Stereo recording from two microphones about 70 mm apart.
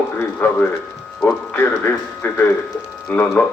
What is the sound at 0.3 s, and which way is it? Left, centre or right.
Speech, left.